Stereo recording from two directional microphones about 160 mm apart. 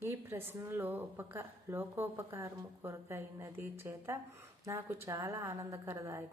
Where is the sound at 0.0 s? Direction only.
15° right (ahead or behind).